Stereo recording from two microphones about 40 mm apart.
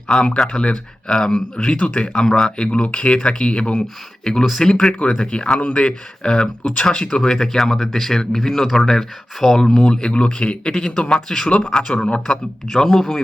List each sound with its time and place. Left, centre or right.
0.1 s speech: left
1.5 s speech: left; by 2.5 s centre
2.6 s speech: left
4.9 s speech: left; by 11.4 s centre
11.4 s speech: left
11.7 s speech: centre